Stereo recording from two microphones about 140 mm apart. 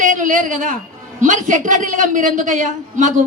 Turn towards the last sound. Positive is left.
turn(degrees=-65)  # may be behind; listen again after turning